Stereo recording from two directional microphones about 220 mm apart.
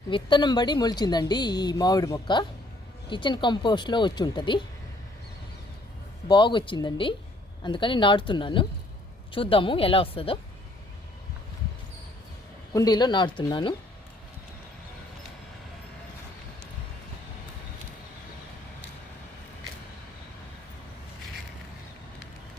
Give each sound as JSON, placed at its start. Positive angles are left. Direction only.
{"t": 0.1, "sound": "speech", "side_deg": 20}
{"t": 6.2, "sound": "speech", "side_deg": 20}
{"t": 12.7, "sound": "speech", "side_deg": 15}